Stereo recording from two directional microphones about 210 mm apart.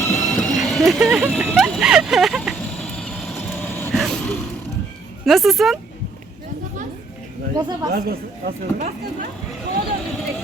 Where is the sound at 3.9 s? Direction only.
5° left (ahead or behind).